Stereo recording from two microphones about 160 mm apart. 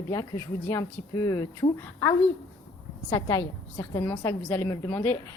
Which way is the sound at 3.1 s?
20° left (ahead or behind).